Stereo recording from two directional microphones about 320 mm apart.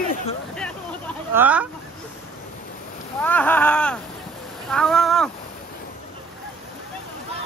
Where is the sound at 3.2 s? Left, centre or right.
Centre.